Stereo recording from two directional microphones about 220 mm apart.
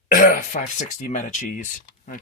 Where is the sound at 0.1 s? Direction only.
40° left (ahead or behind).